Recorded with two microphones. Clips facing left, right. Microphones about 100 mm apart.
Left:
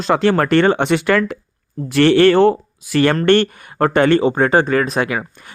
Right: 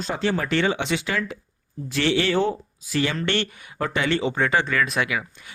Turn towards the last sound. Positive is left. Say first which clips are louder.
# left 6 dB
turn(degrees=45)  # may be behind; listen again after turning